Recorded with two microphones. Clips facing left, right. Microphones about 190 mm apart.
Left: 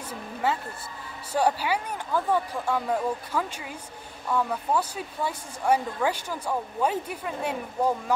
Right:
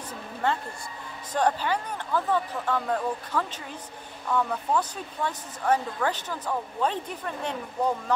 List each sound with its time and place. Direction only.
0.4 s speech: 5° left (ahead or behind)